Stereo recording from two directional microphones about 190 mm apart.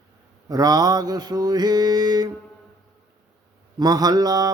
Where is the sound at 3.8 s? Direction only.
20° right (ahead or behind).